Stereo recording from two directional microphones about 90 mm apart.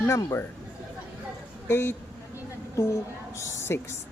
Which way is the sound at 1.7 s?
30° left (ahead or behind).